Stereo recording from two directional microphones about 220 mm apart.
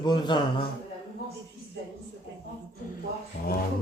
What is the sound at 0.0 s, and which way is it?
Speech, 20° left (ahead or behind).